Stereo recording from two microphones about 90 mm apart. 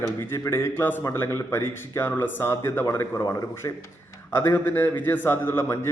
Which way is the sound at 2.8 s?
35° left (ahead or behind).